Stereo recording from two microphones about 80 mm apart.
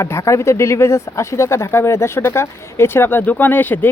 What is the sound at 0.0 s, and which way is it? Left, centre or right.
Speech, left.